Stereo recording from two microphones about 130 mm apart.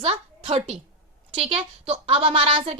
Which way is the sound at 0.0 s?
50° right (ahead or behind).